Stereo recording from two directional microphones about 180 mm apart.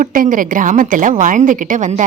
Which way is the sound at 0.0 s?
50° right (ahead or behind).